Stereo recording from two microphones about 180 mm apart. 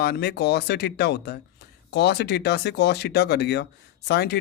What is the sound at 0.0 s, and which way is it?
Speech, 65° left (ahead or behind).